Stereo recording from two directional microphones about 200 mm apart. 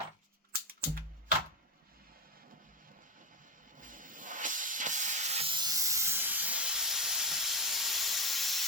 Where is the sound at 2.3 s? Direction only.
45° right (ahead or behind).